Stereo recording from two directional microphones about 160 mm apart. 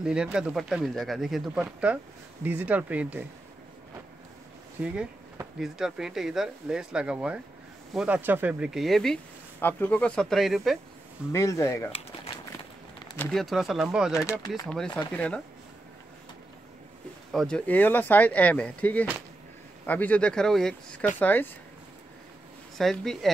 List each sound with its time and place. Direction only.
0.0 s speech: 5° right (ahead or behind)
4.8 s speech: 5° right (ahead or behind)
11.3 s speech: 20° left (ahead or behind)
13.2 s speech: centre (ahead or behind)
15.1 s speech: 10° left (ahead or behind)
17.3 s speech: 5° left (ahead or behind)
22.8 s speech: centre (ahead or behind)